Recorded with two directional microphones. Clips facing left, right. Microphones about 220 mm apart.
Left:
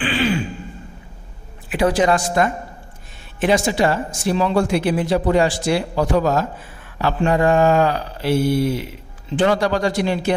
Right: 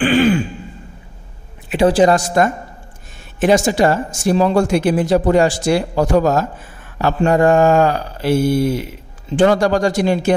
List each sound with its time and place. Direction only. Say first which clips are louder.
0.0 s throat clearing: right 7 dB; 50° right (ahead or behind)
1.7 s a woman's voice: right 5 dB; 30° right (ahead or behind); by 10.3 s 45° right (ahead or behind)